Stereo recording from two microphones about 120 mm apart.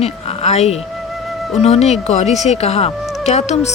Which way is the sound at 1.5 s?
60° left (ahead or behind).